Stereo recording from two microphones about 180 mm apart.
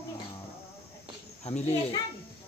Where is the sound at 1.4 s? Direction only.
35° left (ahead or behind).